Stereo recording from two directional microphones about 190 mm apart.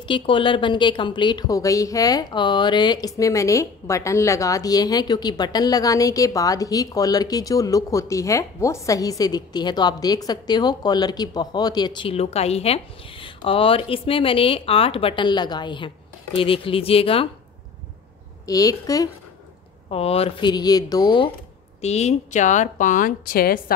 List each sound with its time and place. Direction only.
0.0 s a woman's voice: 25° left (ahead or behind)
18.4 s a woman's voice: 20° left (ahead or behind)
19.9 s a woman's voice: 30° left (ahead or behind)
21.8 s a woman's voice: 35° left (ahead or behind); by 23.6 s 50° left (ahead or behind)